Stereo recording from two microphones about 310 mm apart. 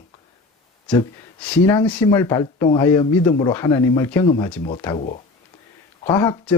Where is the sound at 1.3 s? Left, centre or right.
Centre.